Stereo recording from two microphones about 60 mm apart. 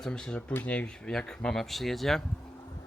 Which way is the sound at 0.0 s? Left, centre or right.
Centre.